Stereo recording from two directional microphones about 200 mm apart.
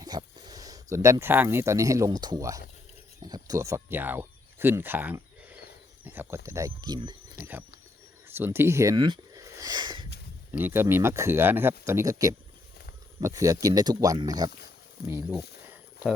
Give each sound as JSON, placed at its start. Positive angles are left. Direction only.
{"t": 0.0, "sound": "speech", "side_deg": -20}
{"t": 8.3, "sound": "speech", "side_deg": -10}
{"t": 10.6, "sound": "speech", "side_deg": -10}